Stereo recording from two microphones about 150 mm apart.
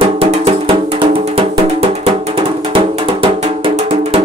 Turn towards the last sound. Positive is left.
turn(degrees=-40)  # may be behind; listen again after turning